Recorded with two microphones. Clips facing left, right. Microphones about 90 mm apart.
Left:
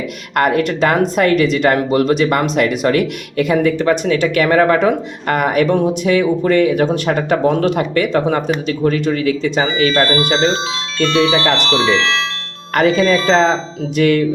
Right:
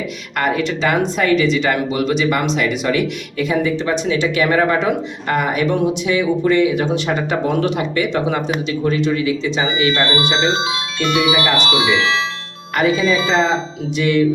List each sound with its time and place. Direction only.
0.3 s speech: 55° left (ahead or behind)
9.6 s speech: 20° right (ahead or behind)
13.9 s speech: 50° left (ahead or behind)